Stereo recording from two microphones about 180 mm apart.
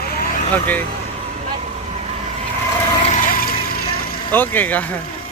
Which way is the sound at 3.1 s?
50° left (ahead or behind).